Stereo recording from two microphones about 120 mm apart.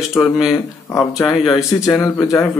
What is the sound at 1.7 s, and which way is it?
Speech, 20° left (ahead or behind).